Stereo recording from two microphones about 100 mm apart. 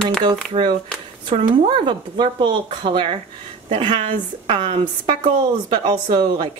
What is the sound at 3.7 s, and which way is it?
Speech, 75° right (ahead or behind).